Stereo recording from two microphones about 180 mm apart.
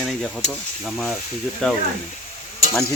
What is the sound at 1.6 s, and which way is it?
Speech, 5° left (ahead or behind).